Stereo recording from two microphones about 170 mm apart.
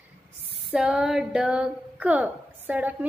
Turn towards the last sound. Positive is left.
turn(degrees=-10)  # may be behind; listen again after turning